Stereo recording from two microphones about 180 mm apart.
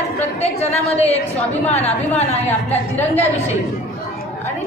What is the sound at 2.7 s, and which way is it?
Speech, 35° left (ahead or behind).